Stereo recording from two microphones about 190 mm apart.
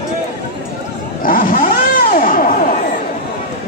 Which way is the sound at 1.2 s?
45° left (ahead or behind).